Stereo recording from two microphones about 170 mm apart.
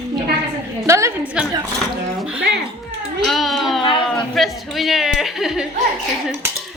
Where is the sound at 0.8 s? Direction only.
15° right (ahead or behind).